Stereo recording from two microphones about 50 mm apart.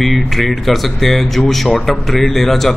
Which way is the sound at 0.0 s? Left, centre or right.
Centre.